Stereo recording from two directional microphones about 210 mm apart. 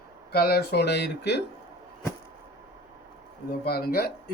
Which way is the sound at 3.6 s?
45° left (ahead or behind).